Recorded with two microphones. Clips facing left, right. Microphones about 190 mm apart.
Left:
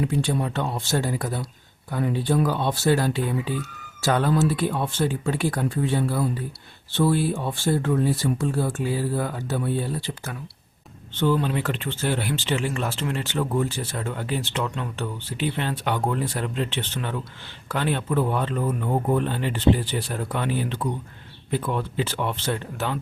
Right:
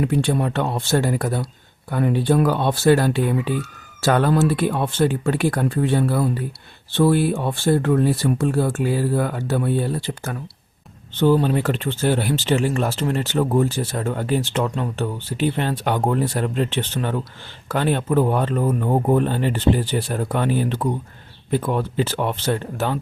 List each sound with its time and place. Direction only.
0.0 s speech: 65° right (ahead or behind)
11.1 s speech: 40° right (ahead or behind)